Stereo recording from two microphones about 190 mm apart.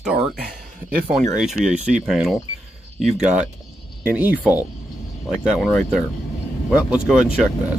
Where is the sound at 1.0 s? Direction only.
5° right (ahead or behind).